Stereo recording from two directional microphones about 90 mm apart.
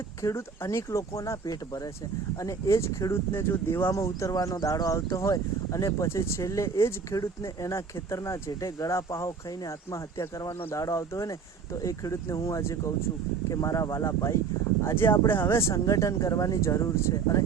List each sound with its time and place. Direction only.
0.2 s speech: 30° left (ahead or behind)